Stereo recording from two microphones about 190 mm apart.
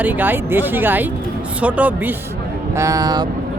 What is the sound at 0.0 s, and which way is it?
Speech, 10° right (ahead or behind).